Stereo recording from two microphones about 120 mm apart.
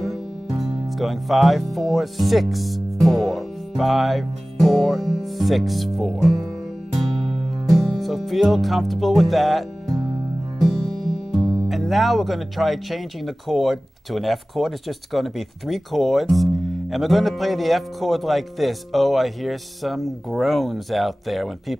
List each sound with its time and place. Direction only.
0.0 s music: centre (ahead or behind)
0.8 s speech: centre (ahead or behind)
7.1 s music: 55° right (ahead or behind)
7.6 s music: centre (ahead or behind)
11.7 s speech: centre (ahead or behind)